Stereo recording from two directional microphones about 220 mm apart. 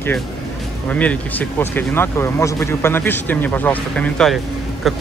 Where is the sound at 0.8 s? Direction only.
5° left (ahead or behind).